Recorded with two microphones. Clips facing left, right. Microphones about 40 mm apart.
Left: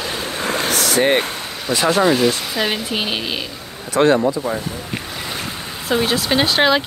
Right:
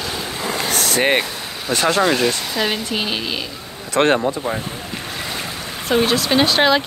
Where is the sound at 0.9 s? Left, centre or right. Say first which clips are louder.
Left 1 dB; right.